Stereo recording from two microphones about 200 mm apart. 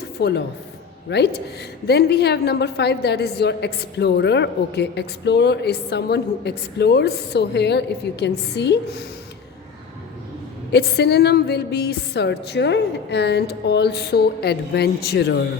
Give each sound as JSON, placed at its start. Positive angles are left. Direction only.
{"t": 0.2, "sound": "a woman's voice", "side_deg": 55}
{"t": 10.7, "sound": "a woman's voice", "side_deg": 55}